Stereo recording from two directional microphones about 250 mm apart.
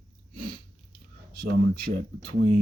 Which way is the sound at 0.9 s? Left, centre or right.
Right.